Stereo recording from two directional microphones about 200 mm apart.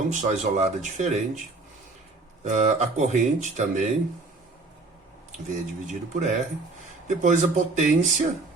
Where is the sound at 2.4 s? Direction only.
35° right (ahead or behind).